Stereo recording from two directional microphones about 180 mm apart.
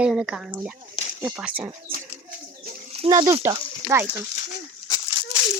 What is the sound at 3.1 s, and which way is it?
Speech, 20° right (ahead or behind).